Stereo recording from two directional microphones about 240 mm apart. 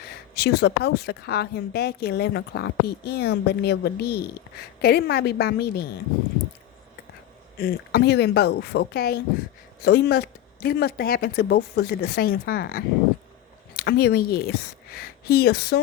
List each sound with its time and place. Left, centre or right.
0.0 s a woman's voice: left
7.6 s a woman's voice: left